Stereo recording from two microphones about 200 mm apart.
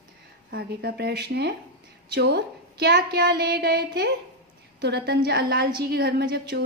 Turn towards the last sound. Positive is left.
turn(degrees=-50)  # may be behind; listen again after turning